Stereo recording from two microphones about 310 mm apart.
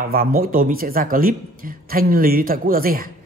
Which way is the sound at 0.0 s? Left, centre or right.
Right.